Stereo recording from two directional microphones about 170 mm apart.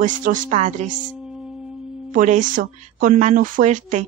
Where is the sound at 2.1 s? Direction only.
50° right (ahead or behind).